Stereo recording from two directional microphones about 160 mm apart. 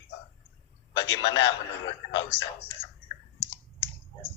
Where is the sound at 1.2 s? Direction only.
30° left (ahead or behind).